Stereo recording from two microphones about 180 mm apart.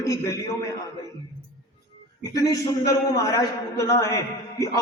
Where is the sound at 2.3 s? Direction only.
20° left (ahead or behind).